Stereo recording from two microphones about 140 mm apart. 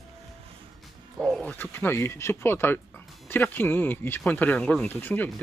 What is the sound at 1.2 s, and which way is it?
Speech, 5° left (ahead or behind).